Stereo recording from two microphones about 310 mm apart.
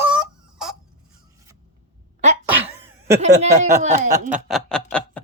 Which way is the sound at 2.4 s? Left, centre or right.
Centre.